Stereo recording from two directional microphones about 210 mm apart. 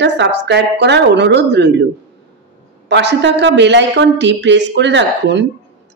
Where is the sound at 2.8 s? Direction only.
55° right (ahead or behind).